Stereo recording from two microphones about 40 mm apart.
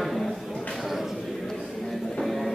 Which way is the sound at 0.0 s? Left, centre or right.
Centre.